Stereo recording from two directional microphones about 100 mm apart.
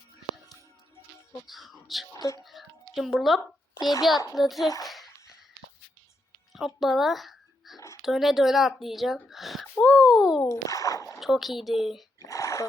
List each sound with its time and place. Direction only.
1.5 s a child's voice: centre (ahead or behind)
6.5 s speech: centre (ahead or behind)
9.7 s speech: 10° left (ahead or behind)
10.0 s a child's voice: 5° right (ahead or behind)
10.5 s a sound: 30° left (ahead or behind)
11.2 s speech: centre (ahead or behind)
12.2 s a sound: 30° left (ahead or behind)